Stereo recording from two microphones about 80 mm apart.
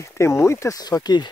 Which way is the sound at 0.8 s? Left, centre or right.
Left.